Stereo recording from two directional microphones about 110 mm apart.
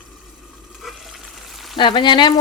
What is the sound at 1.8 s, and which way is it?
Speech, 45° left (ahead or behind).